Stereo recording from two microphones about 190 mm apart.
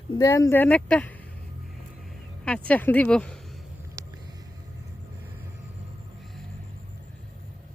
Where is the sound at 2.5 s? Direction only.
10° left (ahead or behind).